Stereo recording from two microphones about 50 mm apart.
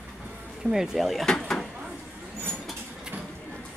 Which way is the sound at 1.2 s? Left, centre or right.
Centre.